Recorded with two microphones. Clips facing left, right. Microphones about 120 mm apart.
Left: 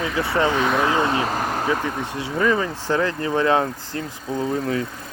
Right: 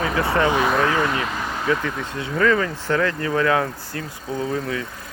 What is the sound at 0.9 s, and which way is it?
Speech, 25° left (ahead or behind).